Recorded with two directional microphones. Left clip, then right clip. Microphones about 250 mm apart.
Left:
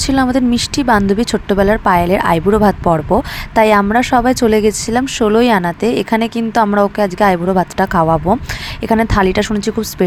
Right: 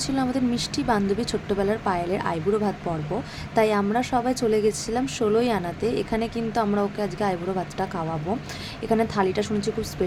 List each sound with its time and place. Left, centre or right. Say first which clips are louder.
0.0 s a woman's voice: left 11 dB; left